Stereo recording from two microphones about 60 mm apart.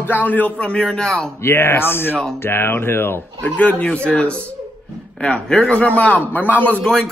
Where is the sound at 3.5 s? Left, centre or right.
Left.